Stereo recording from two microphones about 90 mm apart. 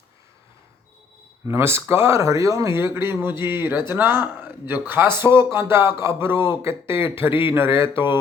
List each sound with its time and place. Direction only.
1.5 s speech: 30° right (ahead or behind)